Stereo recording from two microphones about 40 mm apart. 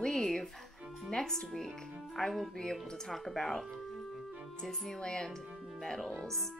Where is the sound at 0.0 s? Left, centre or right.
Centre.